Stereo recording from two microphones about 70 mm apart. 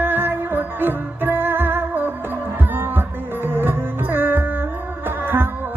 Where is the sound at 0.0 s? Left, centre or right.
Right.